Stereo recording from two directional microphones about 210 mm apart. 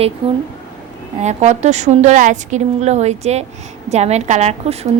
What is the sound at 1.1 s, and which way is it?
A woman's voice, 35° right (ahead or behind).